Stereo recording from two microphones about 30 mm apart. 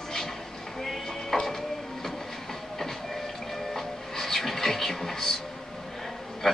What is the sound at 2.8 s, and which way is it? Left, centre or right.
Music, centre.